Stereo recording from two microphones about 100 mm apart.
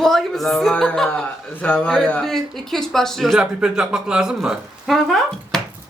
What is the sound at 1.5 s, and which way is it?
Speech, 20° left (ahead or behind).